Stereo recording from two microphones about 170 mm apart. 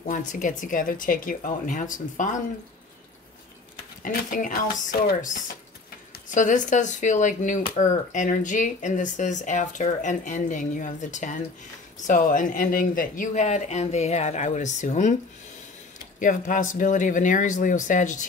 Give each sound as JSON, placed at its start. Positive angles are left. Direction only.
{"t": 0.0, "sound": "speech", "side_deg": 50}
{"t": 4.0, "sound": "speech", "side_deg": 50}
{"t": 16.2, "sound": "speech", "side_deg": 50}